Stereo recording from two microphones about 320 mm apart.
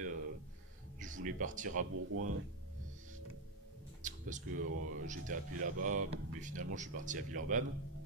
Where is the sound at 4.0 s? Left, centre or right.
Right.